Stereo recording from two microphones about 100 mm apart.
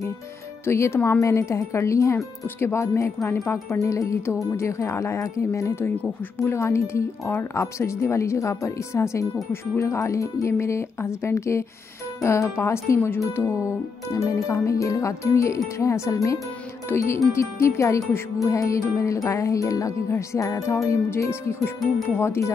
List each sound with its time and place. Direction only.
0.7 s speech: 25° left (ahead or behind)
3.8 s music: 30° left (ahead or behind)
4.6 s speech: 30° left (ahead or behind)
14.1 s music: 30° left (ahead or behind)
16.9 s speech: 25° left (ahead or behind)
18.1 s music: 30° left (ahead or behind)
22.2 s speech: 25° left (ahead or behind)